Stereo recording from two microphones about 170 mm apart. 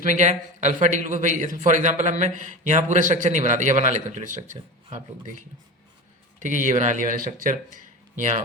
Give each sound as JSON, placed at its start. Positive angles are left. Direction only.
{"t": 0.0, "sound": "a man's voice", "side_deg": -45}
{"t": 6.4, "sound": "a man's voice", "side_deg": -45}